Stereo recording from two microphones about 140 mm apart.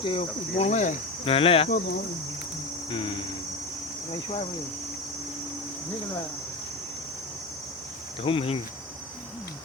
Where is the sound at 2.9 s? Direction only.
35° left (ahead or behind).